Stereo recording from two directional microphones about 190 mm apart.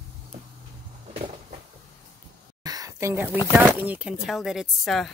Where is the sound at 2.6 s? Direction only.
20° right (ahead or behind).